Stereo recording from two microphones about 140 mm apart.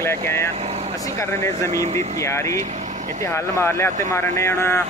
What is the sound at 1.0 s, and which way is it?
Speech, 20° left (ahead or behind).